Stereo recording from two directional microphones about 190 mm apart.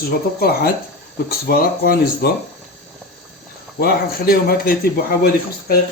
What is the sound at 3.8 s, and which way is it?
A man's voice, 55° left (ahead or behind).